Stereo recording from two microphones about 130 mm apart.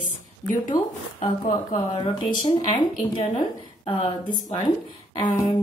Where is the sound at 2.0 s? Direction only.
35° left (ahead or behind).